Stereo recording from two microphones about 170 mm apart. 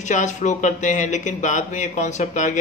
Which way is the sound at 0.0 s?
45° left (ahead or behind).